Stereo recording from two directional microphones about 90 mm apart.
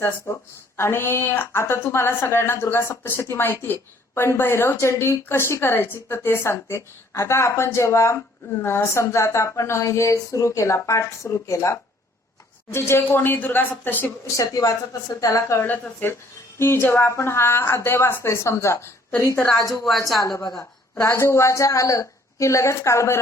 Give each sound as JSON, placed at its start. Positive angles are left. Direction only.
{"t": 0.3, "sound": "a woman's voice", "side_deg": 30}
{"t": 14.3, "sound": "a woman's voice", "side_deg": 40}
{"t": 15.5, "sound": "a woman's voice", "side_deg": 20}
{"t": 20.2, "sound": "a woman's voice", "side_deg": 45}
{"t": 20.9, "sound": "a woman's voice", "side_deg": 30}